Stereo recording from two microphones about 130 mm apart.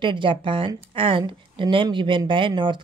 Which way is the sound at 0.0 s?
40° right (ahead or behind).